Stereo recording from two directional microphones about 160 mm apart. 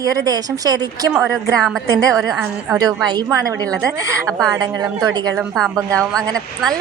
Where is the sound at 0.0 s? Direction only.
20° right (ahead or behind).